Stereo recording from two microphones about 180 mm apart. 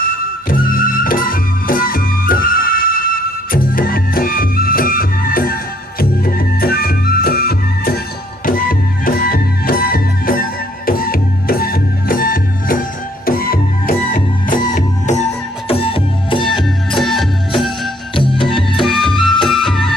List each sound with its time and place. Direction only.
0.0 s music: 55° left (ahead or behind)
9.0 s music: 55° left (ahead or behind)
15.6 s music: 30° left (ahead or behind)
17.0 s music: centre (ahead or behind)
18.1 s music: 30° left (ahead or behind)
18.4 s music: centre (ahead or behind)